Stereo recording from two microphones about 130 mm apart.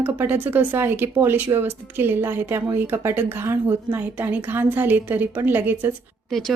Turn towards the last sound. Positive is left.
turn(degrees=5)  # may be behind; listen again after turning